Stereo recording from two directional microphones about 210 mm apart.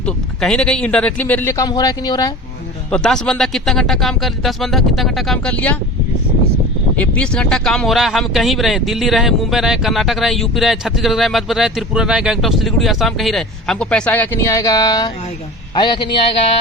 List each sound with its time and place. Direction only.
0.0 s speech: 5° left (ahead or behind)
2.9 s speech: 5° left (ahead or behind)
6.9 s a man's voice: 5° left (ahead or behind)